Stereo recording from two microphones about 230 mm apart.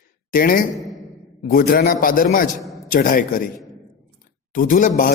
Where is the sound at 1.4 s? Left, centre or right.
Left.